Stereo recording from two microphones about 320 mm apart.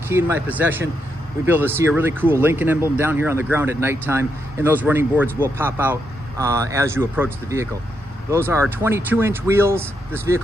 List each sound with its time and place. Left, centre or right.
0.1 s speech: centre